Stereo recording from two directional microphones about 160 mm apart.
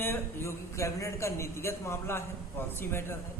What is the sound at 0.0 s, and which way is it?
A man's voice, 15° left (ahead or behind).